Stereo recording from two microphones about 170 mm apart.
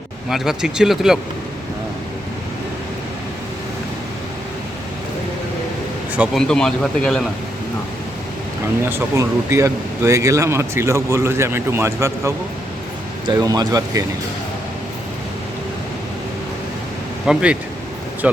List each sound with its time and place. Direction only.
0.3 s speech: centre (ahead or behind)
6.1 s speech: 5° left (ahead or behind)
8.9 s speech: 15° right (ahead or behind)
17.2 s speech: 5° right (ahead or behind)